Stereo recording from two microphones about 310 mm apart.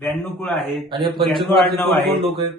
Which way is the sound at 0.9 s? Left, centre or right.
Centre.